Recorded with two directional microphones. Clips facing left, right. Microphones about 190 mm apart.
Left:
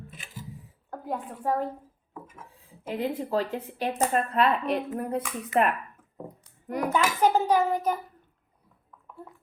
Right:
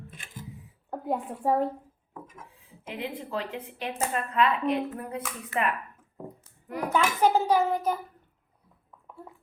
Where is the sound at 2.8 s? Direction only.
40° left (ahead or behind).